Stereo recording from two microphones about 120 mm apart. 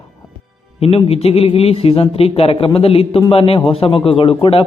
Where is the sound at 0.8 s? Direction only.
55° left (ahead or behind).